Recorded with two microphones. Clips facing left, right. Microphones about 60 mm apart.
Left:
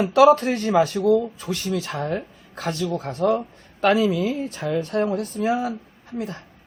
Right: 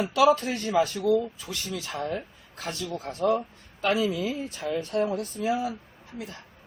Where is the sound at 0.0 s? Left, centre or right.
Left.